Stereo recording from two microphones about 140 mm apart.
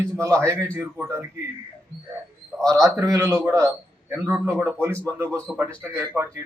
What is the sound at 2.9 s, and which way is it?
A man's voice, 20° right (ahead or behind).